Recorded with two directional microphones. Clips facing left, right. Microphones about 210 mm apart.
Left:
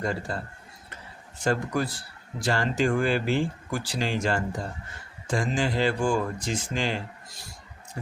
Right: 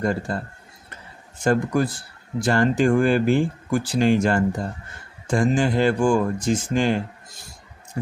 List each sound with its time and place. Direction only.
0.0 s speech: 55° right (ahead or behind)
1.5 s speech: 50° right (ahead or behind)